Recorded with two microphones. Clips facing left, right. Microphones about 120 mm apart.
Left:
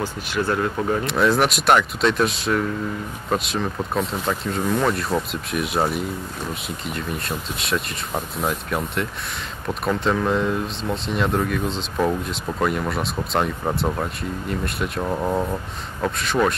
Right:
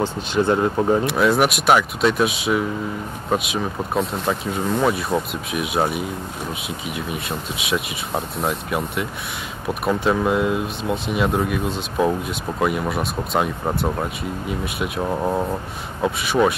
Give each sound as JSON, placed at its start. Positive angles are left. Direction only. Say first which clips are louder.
{"t": 0.0, "sound": "speech", "louder": "right 4 dB", "side_deg": -20}
{"t": 1.0, "sound": "speech", "louder": "right 1 dB", "side_deg": -5}